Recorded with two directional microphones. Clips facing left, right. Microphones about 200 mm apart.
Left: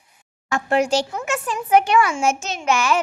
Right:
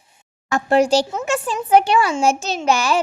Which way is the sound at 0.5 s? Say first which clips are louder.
Right 4 dB; 35° right (ahead or behind).